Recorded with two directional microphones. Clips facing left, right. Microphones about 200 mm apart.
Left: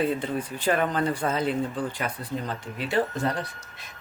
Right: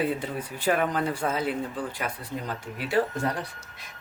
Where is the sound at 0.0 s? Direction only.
5° right (ahead or behind).